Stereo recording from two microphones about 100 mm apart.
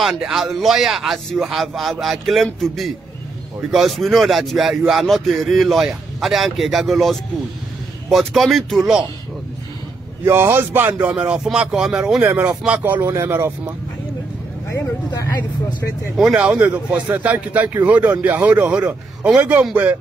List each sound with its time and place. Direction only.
0.2 s a man's voice: 5° right (ahead or behind)
10.2 s speech: 25° right (ahead or behind); by 12.2 s 5° right (ahead or behind)
12.2 s speech: 15° right (ahead or behind)
15.0 s speech: 35° left (ahead or behind)
16.2 s speech: 5° right (ahead or behind)